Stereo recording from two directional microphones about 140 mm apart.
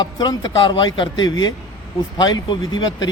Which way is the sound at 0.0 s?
30° left (ahead or behind).